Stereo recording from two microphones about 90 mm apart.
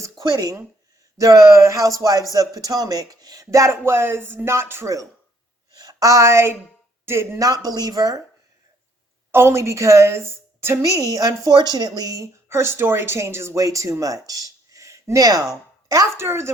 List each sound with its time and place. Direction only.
0.2 s a woman's voice: 50° right (ahead or behind); by 5.0 s 30° right (ahead or behind)
5.8 s speech: 45° right (ahead or behind)
7.6 s speech: 45° right (ahead or behind)
9.3 s a woman's voice: 30° right (ahead or behind)